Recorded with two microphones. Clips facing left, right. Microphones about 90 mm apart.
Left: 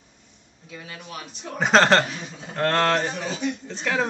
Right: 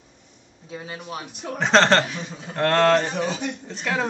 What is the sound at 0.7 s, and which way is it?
Speech, 30° right (ahead or behind).